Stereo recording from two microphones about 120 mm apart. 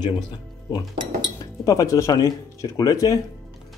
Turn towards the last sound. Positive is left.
turn(degrees=30)  # may be behind; listen again after turning